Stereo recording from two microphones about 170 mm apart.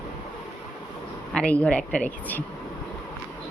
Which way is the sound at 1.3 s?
5° left (ahead or behind).